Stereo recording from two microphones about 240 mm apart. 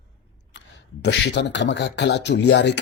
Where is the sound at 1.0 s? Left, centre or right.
Left.